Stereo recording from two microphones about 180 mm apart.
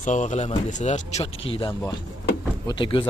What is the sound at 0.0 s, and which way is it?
Speech, 40° left (ahead or behind).